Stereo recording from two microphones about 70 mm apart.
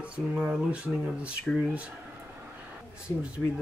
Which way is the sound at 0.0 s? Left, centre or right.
Centre.